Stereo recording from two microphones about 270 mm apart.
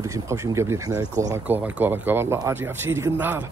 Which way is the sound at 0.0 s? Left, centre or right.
Centre.